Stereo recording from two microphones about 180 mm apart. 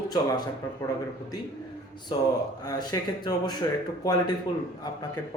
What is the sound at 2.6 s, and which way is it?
A man's voice, 20° left (ahead or behind).